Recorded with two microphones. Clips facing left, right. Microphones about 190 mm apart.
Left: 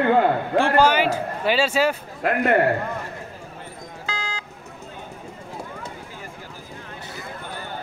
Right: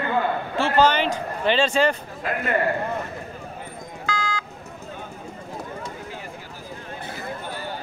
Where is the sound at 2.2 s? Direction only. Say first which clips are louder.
Left 5 dB; 65° left (ahead or behind).